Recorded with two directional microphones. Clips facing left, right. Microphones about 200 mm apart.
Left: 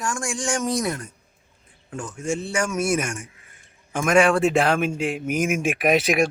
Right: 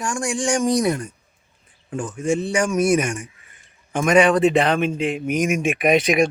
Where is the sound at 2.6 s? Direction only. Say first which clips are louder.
Right 5 dB; 10° right (ahead or behind).